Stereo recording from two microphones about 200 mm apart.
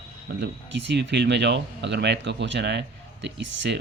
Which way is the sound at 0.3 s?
60° right (ahead or behind).